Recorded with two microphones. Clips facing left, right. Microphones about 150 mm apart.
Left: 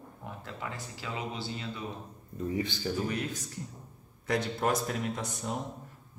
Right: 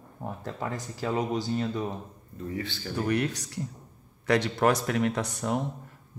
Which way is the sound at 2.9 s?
65° right (ahead or behind).